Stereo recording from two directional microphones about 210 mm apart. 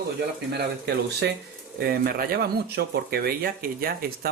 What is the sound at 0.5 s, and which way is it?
Speech, 50° right (ahead or behind).